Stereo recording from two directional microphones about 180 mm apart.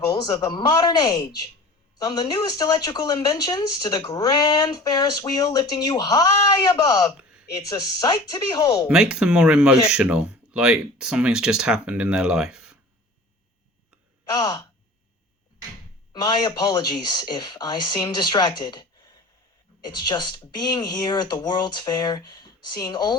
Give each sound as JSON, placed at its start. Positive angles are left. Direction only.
{"t": 0.1, "sound": "speech", "side_deg": 20}
{"t": 8.9, "sound": "speech", "side_deg": -5}
{"t": 14.3, "sound": "speech", "side_deg": 20}
{"t": 16.2, "sound": "speech", "side_deg": 20}